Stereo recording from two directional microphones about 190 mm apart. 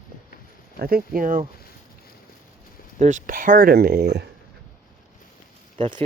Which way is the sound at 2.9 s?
40° right (ahead or behind).